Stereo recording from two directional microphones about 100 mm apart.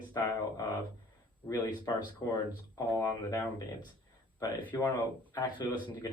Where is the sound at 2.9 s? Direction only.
30° left (ahead or behind).